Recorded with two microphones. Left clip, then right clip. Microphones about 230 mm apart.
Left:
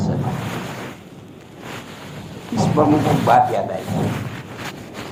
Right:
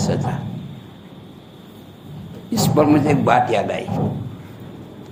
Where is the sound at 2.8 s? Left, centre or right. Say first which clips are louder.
Right 1 dB; right.